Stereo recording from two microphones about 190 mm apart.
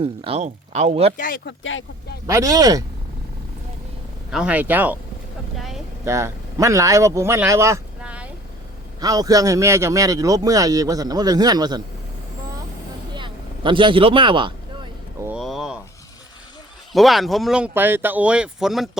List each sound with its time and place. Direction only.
0.0 s speech: 30° right (ahead or behind)
1.1 s speech: 45° left (ahead or behind)
1.5 s speech: 75° left (ahead or behind)
2.2 s a man's voice: 15° right (ahead or behind)
4.3 s speech: 5° right (ahead or behind)
5.5 s vehicle: centre (ahead or behind)
6.1 s speech: 15° right (ahead or behind)
9.0 s a man's voice: 20° right (ahead or behind)
13.1 s speech: 25° right (ahead or behind)
15.2 s a sound: 5° right (ahead or behind)
16.9 s speech: centre (ahead or behind)